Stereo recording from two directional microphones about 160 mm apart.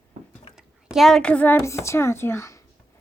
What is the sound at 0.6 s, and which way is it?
A woman's voice, centre (ahead or behind).